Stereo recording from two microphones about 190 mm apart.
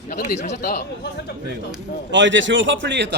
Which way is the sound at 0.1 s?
50° left (ahead or behind).